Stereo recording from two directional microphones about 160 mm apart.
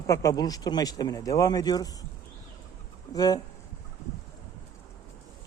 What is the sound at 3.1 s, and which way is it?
Speech, 25° left (ahead or behind).